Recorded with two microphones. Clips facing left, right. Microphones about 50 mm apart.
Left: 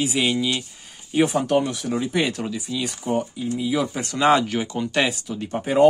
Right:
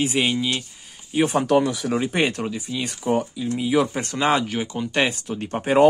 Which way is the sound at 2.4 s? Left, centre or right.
Centre.